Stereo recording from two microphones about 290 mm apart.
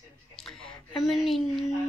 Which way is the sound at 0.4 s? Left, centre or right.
Centre.